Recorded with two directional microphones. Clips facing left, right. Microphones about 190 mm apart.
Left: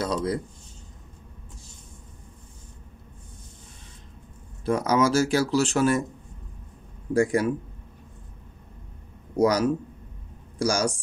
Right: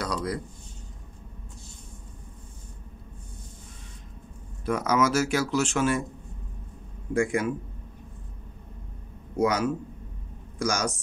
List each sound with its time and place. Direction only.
0.0 s a sound: 25° left (ahead or behind)
4.6 s speech: 30° left (ahead or behind)
7.2 s speech: 35° left (ahead or behind)
9.4 s speech: 40° left (ahead or behind)